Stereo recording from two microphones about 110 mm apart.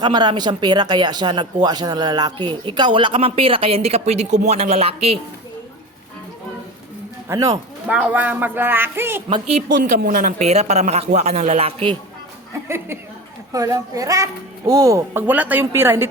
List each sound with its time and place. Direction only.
0.0 s speech: 40° right (ahead or behind); by 5.2 s 65° right (ahead or behind)
7.3 s speech: 30° right (ahead or behind)
7.9 s speech: 15° right (ahead or behind)
10.3 s a man's voice: 85° right; by 11.9 s 60° right (ahead or behind)
12.6 s speech: 20° right (ahead or behind)
13.5 s a woman's voice: 30° right (ahead or behind)
15.3 s speech: 15° right (ahead or behind)